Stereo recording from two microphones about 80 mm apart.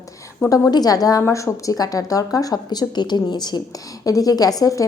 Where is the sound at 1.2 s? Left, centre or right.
Left.